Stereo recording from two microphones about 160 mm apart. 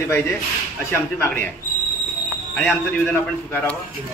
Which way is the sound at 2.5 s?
Centre (ahead or behind).